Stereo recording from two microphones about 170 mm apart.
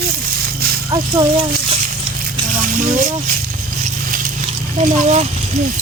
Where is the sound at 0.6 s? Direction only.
65° right (ahead or behind).